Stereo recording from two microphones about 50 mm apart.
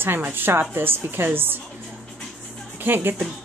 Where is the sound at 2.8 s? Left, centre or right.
Right.